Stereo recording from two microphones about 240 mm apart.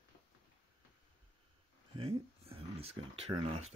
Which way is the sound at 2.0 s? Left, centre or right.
Right.